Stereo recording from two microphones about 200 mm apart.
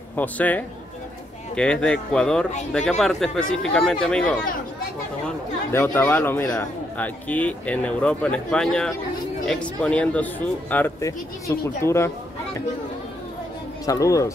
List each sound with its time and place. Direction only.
0.1 s speech: 10° left (ahead or behind)
13.8 s speech: 15° left (ahead or behind)